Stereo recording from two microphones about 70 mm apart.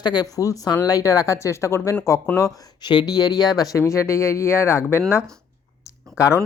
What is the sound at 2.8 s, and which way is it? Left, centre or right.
Speech, left.